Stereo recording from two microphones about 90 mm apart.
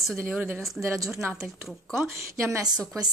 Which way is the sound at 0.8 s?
35° right (ahead or behind).